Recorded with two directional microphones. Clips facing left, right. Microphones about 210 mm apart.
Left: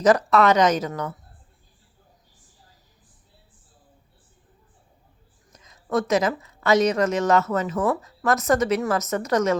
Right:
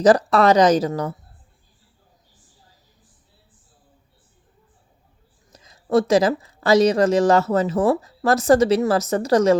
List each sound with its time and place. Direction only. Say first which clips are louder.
0.0 s speech: right 3 dB; 35° right (ahead or behind)
5.5 s a woman's voice: right 6 dB; 35° right (ahead or behind)